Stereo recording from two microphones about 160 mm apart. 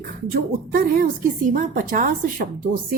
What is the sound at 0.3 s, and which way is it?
A woman's voice, 65° right (ahead or behind).